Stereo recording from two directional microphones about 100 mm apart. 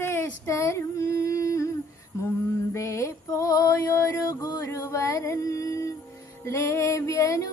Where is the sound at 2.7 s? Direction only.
30° left (ahead or behind).